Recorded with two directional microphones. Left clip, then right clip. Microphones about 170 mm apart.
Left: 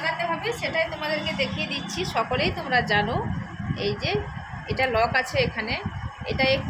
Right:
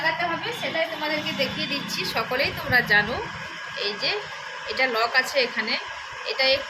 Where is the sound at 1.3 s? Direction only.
30° left (ahead or behind).